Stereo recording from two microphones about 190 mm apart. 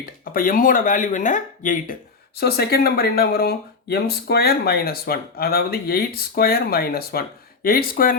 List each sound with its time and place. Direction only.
0.0 s speech: 50° left (ahead or behind)